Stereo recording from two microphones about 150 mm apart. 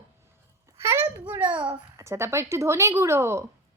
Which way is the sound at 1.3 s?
10° right (ahead or behind).